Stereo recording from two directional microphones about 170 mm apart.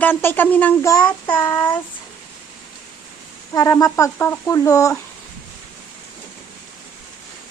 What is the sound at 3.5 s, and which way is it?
A child's voice, 20° left (ahead or behind).